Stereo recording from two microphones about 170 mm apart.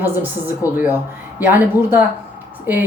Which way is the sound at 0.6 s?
20° left (ahead or behind).